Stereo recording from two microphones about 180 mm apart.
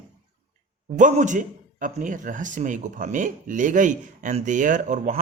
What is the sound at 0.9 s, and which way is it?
Speech, 45° right (ahead or behind).